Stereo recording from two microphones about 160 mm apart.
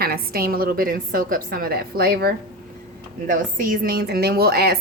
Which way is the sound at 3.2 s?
55° right (ahead or behind).